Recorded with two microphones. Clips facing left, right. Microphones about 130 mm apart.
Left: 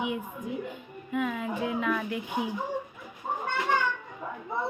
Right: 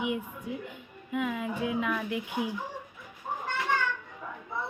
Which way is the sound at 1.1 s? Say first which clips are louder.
Left 1 dB; 15° right (ahead or behind).